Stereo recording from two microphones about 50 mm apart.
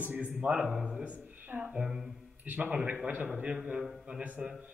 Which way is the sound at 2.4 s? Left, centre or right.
Right.